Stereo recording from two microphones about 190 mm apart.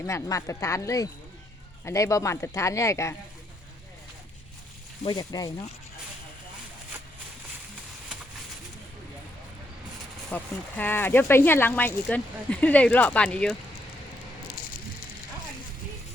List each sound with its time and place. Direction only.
0.0 s speech: 15° left (ahead or behind)
5.0 s speech: 20° left (ahead or behind)
10.3 s speech: 10° left (ahead or behind)